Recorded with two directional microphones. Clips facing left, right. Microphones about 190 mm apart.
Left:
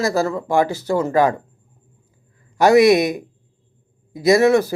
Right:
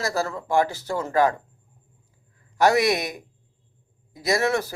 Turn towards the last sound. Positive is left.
turn(degrees=15)  # may be behind; listen again after turning